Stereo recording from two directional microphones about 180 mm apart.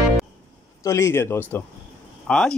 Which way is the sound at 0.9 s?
15° left (ahead or behind).